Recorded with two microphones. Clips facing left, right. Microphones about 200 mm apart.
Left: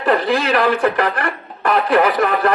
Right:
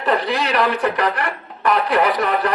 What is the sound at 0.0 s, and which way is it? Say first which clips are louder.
Speech: left 3 dB; 45° left (ahead or behind).